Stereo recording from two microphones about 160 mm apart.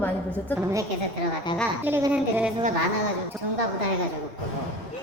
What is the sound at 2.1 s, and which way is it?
Speech, 10° right (ahead or behind).